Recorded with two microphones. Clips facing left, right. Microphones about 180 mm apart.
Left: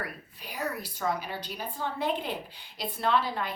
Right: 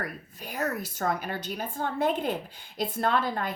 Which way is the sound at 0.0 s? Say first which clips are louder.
Right 3 dB; 45° right (ahead or behind).